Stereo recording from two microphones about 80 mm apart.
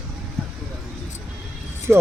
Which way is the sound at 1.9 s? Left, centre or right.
Centre.